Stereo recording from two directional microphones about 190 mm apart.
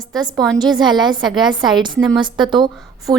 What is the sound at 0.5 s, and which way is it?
A woman's voice, 20° right (ahead or behind).